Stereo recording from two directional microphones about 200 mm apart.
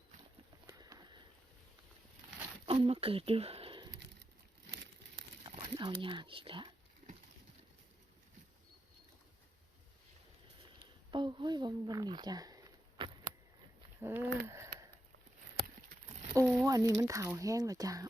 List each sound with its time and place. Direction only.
0.7 s clip-clop: 20° right (ahead or behind)
2.6 s speech: 30° right (ahead or behind)
5.5 s speech: 25° right (ahead or behind)
11.1 s speech: 25° right (ahead or behind)
13.0 s a sound: 25° right (ahead or behind)
14.0 s speech: 10° right (ahead or behind)
14.4 s a sound: 15° right (ahead or behind)
16.3 s speech: 15° right (ahead or behind)